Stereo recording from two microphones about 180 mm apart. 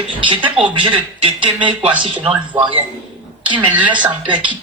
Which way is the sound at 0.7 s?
25° right (ahead or behind).